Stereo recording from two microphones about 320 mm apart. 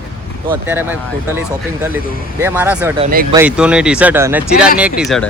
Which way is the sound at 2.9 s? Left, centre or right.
Right.